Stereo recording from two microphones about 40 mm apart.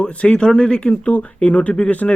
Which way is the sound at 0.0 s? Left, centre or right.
Left.